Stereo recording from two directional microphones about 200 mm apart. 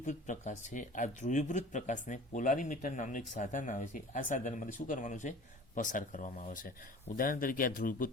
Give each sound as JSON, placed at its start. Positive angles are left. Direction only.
{"t": 0.0, "sound": "speech", "side_deg": 35}